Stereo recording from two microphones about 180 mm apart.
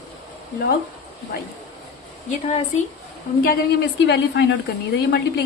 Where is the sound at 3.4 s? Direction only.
60° left (ahead or behind).